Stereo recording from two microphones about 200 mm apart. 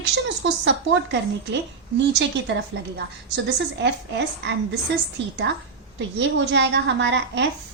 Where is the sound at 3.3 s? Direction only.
60° right (ahead or behind).